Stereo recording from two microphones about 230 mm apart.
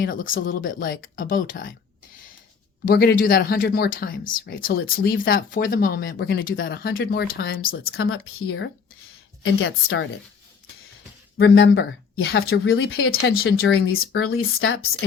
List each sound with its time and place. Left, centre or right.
0.0 s speech: left
2.8 s speech: left
7.9 s speech: left
11.3 s speech: left
13.0 s speech: left